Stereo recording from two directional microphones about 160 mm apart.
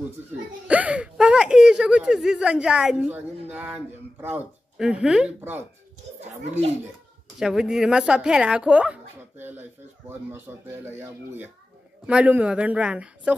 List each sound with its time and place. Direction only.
0.7 s speech: 10° right (ahead or behind)
6.4 s a child's voice: 45° right (ahead or behind)
7.3 s a woman's voice: 5° right (ahead or behind)